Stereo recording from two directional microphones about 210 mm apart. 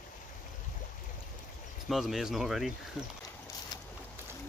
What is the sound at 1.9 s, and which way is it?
Speech, centre (ahead or behind).